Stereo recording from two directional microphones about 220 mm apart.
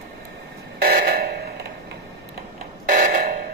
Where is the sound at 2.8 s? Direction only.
40° right (ahead or behind).